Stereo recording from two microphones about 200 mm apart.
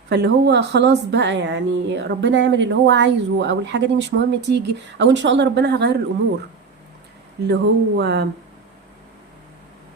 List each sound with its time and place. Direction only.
0.1 s a woman's voice: 60° right (ahead or behind)
7.4 s a woman's voice: 55° right (ahead or behind)